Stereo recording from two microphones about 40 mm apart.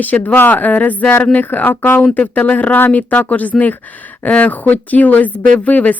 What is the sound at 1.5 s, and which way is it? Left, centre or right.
A woman's voice, left.